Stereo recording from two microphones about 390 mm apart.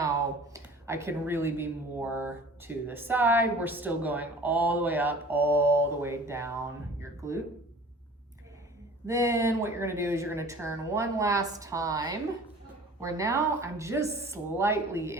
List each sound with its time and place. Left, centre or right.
0.5 s speech: centre
9.0 s a woman's voice: centre